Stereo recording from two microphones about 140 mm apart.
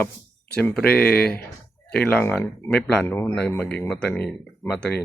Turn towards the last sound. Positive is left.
turn(degrees=5)  # may be behind; listen again after turning